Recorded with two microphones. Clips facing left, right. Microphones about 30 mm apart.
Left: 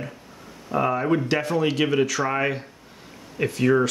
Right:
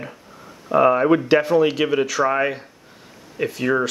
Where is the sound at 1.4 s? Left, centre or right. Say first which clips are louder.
Right 5 dB; centre.